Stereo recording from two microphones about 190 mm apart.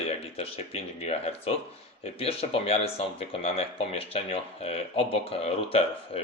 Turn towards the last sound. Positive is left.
turn(degrees=30)  # may be behind; listen again after turning